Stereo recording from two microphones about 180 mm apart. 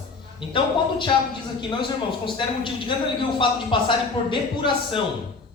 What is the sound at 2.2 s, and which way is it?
Speech, 25° left (ahead or behind).